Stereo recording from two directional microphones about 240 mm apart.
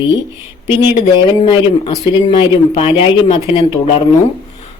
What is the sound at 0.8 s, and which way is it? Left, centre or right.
Speech, left.